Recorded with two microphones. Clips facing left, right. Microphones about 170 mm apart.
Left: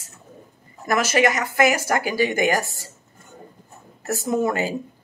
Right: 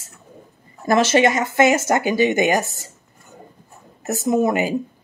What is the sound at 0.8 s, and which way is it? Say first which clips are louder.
Speech: right 4 dB; 25° right (ahead or behind).